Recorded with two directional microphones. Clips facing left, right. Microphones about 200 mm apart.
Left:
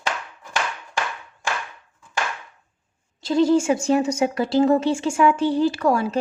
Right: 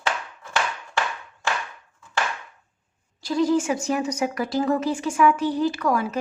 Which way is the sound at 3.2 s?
25° left (ahead or behind).